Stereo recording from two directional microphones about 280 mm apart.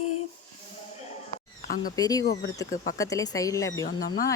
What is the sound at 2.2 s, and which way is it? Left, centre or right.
Speech, left.